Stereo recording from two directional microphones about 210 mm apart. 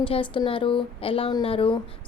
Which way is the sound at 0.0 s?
25° left (ahead or behind).